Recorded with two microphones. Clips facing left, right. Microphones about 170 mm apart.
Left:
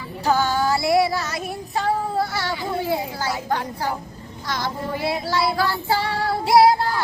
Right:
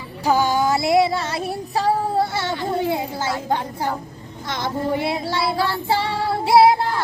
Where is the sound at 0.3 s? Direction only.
15° right (ahead or behind).